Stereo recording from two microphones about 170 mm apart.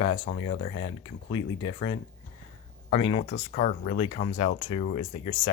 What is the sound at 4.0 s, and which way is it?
Speech, 35° left (ahead or behind).